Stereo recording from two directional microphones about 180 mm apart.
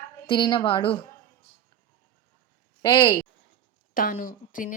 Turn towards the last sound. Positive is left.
turn(degrees=45)  # may be behind; listen again after turning